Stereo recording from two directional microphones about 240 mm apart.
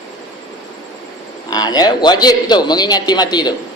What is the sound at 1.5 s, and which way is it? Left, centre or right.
A man's voice, centre.